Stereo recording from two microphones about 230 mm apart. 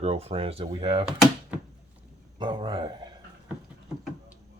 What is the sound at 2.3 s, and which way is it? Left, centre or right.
Speech, centre.